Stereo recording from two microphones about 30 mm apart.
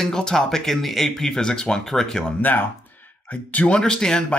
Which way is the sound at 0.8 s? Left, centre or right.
Centre.